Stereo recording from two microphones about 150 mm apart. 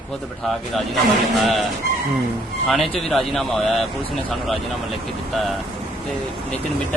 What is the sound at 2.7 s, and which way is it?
A man's voice, centre (ahead or behind).